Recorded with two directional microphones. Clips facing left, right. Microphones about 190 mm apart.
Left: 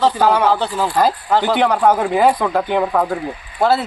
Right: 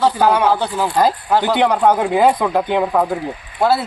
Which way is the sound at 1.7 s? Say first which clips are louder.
Even; 5° left (ahead or behind).